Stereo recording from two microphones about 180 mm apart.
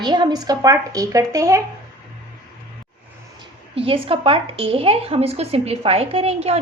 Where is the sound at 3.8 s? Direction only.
30° right (ahead or behind).